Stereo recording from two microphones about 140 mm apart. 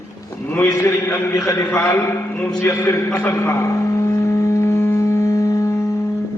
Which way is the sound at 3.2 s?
20° left (ahead or behind).